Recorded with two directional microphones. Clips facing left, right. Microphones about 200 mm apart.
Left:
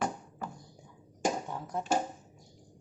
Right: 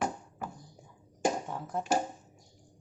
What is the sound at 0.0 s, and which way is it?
Music, 10° right (ahead or behind).